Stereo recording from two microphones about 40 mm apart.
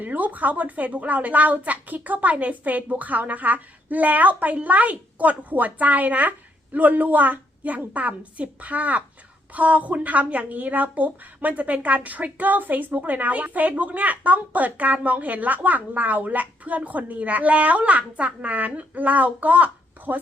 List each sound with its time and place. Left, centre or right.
0.0 s a woman's voice: right
20.1 s a woman's voice: right